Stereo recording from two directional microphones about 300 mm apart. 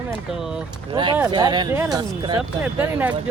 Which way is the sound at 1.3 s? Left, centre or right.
Centre.